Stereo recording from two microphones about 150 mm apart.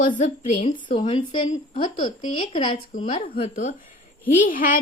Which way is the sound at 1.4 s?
50° left (ahead or behind).